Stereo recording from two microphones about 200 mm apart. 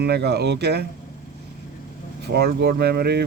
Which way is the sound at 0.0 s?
55° right (ahead or behind).